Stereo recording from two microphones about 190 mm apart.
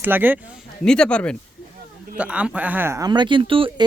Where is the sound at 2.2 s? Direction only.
5° right (ahead or behind); by 3.7 s 30° right (ahead or behind).